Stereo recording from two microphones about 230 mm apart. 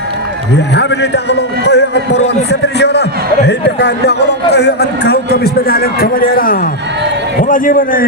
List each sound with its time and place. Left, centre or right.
0.5 s a man's voice: left